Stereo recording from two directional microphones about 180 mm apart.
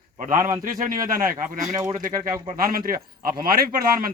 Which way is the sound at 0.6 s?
50° right (ahead or behind).